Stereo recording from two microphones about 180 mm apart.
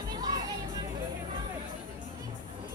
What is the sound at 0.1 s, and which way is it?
Music, 20° right (ahead or behind).